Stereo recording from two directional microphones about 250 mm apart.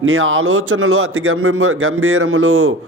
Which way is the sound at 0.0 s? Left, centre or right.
Right.